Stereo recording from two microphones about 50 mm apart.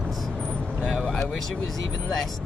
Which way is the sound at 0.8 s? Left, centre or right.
Centre.